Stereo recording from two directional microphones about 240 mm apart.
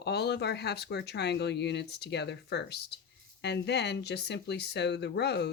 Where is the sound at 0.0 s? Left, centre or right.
Left.